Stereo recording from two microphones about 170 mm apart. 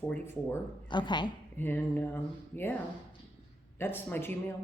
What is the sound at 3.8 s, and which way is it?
Speech, 10° left (ahead or behind).